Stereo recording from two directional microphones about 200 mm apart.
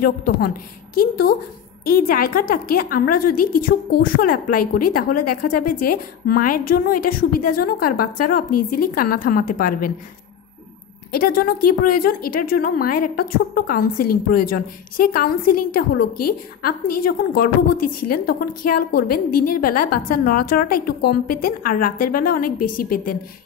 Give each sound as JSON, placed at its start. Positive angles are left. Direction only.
{"t": 0.0, "sound": "a woman's voice", "side_deg": 45}
{"t": 11.1, "sound": "a woman's voice", "side_deg": 45}